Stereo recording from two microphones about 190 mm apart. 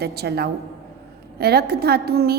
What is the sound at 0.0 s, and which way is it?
A woman's voice, 55° right (ahead or behind).